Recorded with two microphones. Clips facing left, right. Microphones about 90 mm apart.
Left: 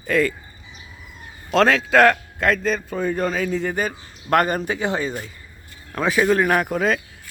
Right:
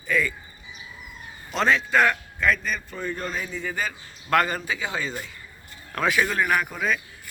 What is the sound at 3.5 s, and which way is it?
A man's voice, 45° left (ahead or behind).